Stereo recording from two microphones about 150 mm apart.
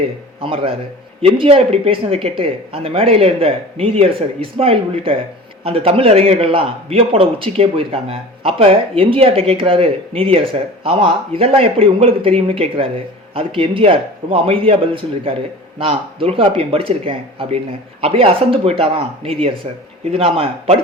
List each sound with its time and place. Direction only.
0.4 s a man's voice: 40° right (ahead or behind)